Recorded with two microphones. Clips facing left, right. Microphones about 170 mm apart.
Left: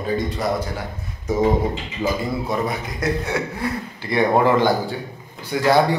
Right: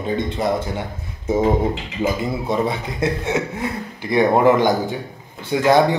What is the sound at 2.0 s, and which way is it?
A man's voice, 25° right (ahead or behind).